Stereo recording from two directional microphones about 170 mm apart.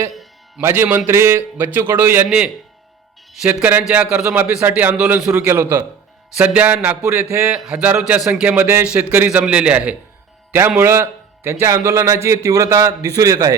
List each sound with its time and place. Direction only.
0.1 s music: centre (ahead or behind)
0.6 s a man's voice: 10° right (ahead or behind)
7.5 s a man's voice: centre (ahead or behind); by 13.6 s 20° right (ahead or behind)